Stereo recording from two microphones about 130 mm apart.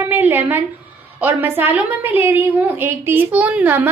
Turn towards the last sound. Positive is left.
turn(degrees=-10)  # may be behind; listen again after turning